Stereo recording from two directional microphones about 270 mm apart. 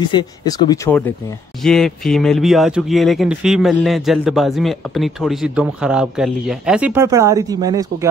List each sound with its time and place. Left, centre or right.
0.0 s speech: centre
1.6 s speech: centre